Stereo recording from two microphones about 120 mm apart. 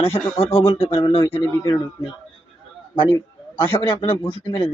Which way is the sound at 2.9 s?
40° left (ahead or behind).